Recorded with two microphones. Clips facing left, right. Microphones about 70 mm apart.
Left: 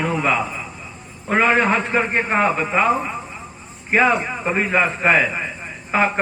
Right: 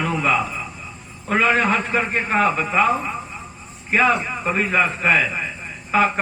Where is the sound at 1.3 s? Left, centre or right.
Left.